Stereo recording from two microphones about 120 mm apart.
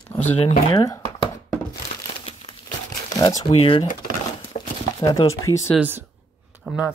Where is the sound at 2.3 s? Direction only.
50° left (ahead or behind).